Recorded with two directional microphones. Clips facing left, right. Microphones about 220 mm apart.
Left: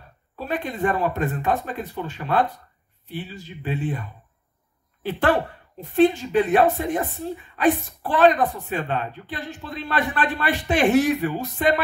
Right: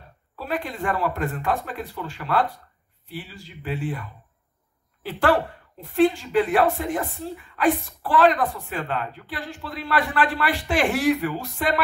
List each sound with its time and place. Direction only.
0.4 s a woman's voice: 20° left (ahead or behind)
5.8 s a woman's voice: 20° left (ahead or behind)